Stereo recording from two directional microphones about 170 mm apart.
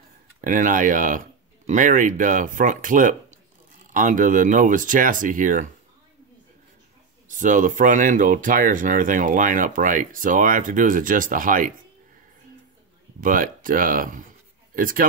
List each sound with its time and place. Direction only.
0.4 s speech: 50° right (ahead or behind)
7.2 s speech: 50° right (ahead or behind)
13.2 s speech: 55° right (ahead or behind)